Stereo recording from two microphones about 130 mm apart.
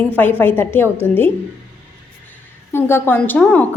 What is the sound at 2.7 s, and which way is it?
Speech, 20° left (ahead or behind).